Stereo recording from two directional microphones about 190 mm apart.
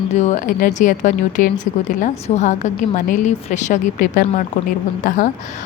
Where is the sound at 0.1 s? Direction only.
40° left (ahead or behind).